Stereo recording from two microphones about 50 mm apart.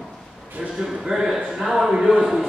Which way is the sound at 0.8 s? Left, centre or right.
Centre.